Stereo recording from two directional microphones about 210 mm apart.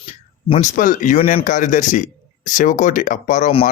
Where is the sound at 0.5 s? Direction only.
35° left (ahead or behind).